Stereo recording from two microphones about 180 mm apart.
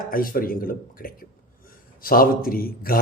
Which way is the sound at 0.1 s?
50° left (ahead or behind).